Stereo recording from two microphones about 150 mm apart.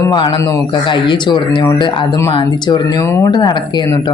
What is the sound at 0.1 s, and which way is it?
Speech, 30° left (ahead or behind).